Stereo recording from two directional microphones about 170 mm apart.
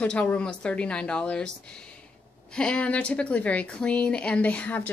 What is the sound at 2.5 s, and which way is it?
A woman's voice, 5° left (ahead or behind).